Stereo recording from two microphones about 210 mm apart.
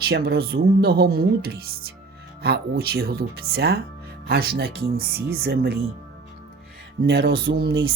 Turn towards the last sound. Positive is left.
turn(degrees=-50)  # may be behind; listen again after turning